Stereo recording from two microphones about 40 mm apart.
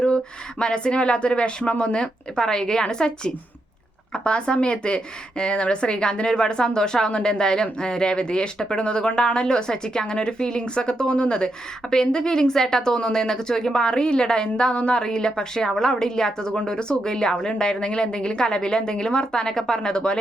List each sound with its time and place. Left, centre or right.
0.6 s a woman's voice: left